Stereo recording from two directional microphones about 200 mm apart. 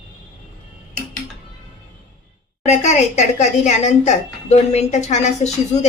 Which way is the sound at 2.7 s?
35° left (ahead or behind).